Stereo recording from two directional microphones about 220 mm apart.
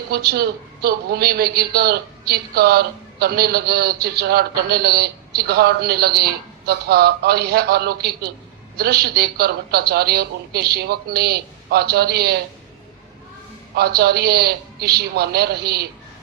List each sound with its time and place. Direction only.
0.1 s a man's voice: 45° right (ahead or behind)
13.7 s a man's voice: 45° right (ahead or behind)